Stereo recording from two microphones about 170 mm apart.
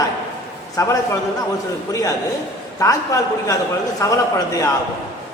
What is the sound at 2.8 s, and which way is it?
A man's voice, 20° left (ahead or behind).